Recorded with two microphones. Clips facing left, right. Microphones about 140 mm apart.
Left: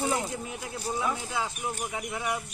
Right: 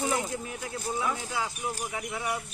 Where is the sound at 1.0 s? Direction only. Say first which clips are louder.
Left 1 dB; 20° left (ahead or behind).